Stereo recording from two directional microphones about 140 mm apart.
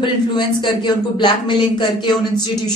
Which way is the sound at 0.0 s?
35° left (ahead or behind).